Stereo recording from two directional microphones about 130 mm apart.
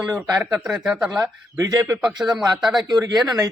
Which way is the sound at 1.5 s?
25° right (ahead or behind).